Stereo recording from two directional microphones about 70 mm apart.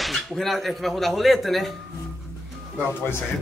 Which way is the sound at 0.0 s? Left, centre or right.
Centre.